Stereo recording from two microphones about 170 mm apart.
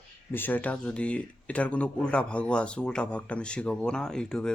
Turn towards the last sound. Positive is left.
turn(degrees=5)  # may be behind; listen again after turning